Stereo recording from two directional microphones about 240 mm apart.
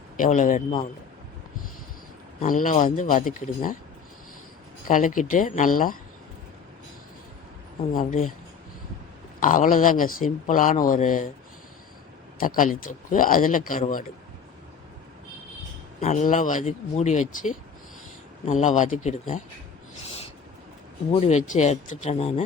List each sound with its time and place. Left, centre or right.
0.2 s speech: left
2.4 s speech: left
4.9 s speech: left
7.9 s speech: left
9.4 s speech: left
12.4 s speech: left
16.0 s speech: left
21.1 s speech: left